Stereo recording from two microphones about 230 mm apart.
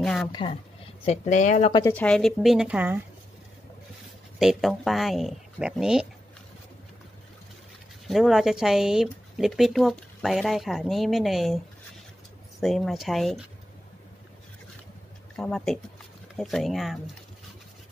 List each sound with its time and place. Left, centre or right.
0.0 s a sound: centre
0.3 s speech: centre
1.0 s speech: left
1.7 s speech: centre
2.0 s speech: centre
4.4 s speech: centre
8.1 s speech: centre
15.3 s speech: centre